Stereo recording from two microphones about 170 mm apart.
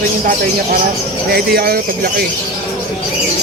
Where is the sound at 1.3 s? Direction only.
65° right (ahead or behind).